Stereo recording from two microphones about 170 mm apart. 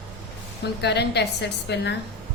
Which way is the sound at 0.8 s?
80° left.